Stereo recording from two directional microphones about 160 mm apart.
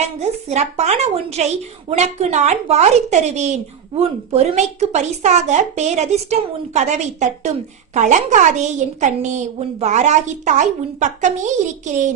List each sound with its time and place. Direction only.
0.0 s a woman's voice: 45° right (ahead or behind)